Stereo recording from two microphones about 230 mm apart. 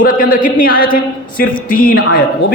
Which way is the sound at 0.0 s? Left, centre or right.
Left.